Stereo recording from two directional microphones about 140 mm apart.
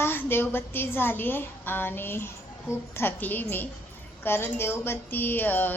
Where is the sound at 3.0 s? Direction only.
15° left (ahead or behind).